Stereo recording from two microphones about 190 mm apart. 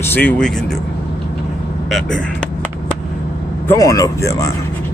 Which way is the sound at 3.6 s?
15° left (ahead or behind).